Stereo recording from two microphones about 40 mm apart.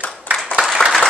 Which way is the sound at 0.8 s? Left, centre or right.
Centre.